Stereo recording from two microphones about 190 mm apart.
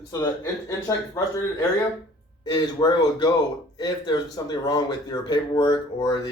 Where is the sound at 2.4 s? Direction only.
20° left (ahead or behind).